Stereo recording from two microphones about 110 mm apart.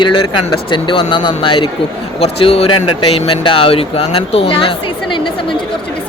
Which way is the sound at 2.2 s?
60° left (ahead or behind).